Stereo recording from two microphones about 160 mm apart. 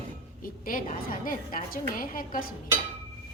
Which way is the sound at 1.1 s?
60° left (ahead or behind).